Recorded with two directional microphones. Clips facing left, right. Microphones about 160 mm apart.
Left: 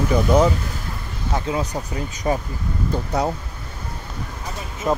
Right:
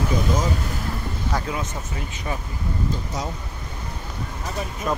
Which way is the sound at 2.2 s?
40° left (ahead or behind).